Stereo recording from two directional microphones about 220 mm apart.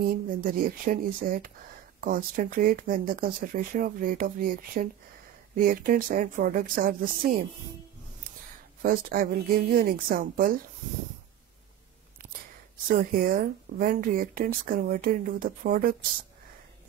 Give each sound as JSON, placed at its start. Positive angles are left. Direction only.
{"t": 0.0, "sound": "speech", "side_deg": -40}
{"t": 8.8, "sound": "speech", "side_deg": -40}
{"t": 12.9, "sound": "speech", "side_deg": -40}